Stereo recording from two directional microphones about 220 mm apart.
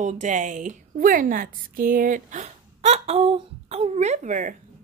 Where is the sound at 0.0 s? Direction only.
35° right (ahead or behind).